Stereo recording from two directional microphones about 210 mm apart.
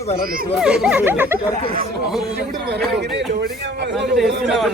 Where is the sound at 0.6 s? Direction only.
5° right (ahead or behind).